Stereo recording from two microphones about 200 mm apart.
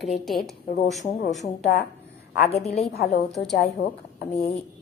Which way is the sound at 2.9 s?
50° left (ahead or behind).